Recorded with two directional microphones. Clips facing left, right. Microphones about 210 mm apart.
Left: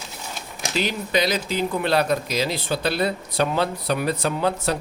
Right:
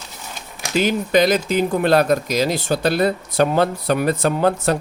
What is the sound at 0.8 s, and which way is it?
Speech, 50° right (ahead or behind).